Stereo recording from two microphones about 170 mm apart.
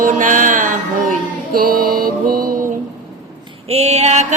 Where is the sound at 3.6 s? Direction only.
40° right (ahead or behind).